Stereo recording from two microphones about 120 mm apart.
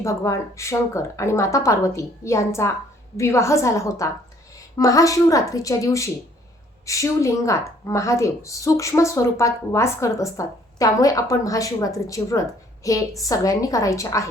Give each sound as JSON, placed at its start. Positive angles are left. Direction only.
{"t": 0.0, "sound": "a woman's voice", "side_deg": 25}